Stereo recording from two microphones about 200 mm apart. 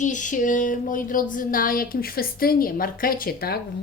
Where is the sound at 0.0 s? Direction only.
40° left (ahead or behind).